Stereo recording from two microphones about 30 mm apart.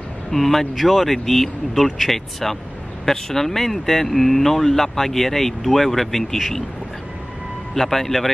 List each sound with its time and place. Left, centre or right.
0.3 s speech: centre
7.7 s speech: centre